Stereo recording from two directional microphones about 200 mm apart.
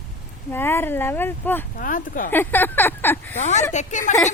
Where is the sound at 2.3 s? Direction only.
10° left (ahead or behind).